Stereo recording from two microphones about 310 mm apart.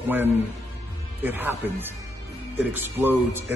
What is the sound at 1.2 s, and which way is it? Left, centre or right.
A man's voice, centre.